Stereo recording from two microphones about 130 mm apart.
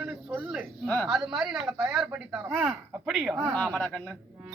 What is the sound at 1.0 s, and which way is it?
A woman's voice, 5° right (ahead or behind).